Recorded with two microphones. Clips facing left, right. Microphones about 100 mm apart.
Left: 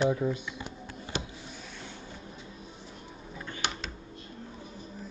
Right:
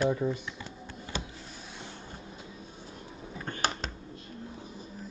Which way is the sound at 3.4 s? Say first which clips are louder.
Right 4 dB; 45° right (ahead or behind).